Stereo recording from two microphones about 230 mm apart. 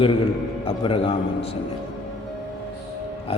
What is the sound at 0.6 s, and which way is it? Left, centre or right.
Speech, left.